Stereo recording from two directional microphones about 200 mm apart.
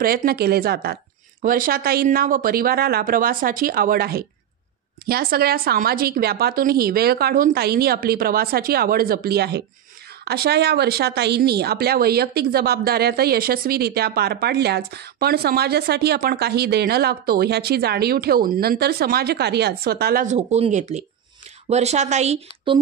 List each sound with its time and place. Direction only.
0.0 s speech: 50° right (ahead or behind); by 22.8 s 35° right (ahead or behind)